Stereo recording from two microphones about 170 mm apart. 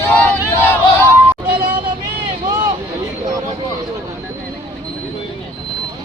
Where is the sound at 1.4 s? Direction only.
30° right (ahead or behind).